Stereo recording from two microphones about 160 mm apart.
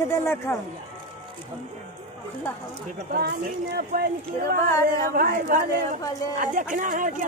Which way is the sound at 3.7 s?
75° right (ahead or behind).